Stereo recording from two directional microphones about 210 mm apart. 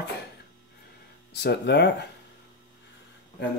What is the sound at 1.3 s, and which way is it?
Speech, 50° left (ahead or behind).